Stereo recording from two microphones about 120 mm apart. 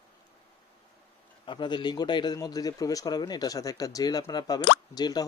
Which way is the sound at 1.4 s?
40° left (ahead or behind).